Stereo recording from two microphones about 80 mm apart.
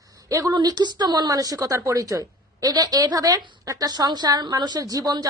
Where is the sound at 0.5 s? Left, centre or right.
Right.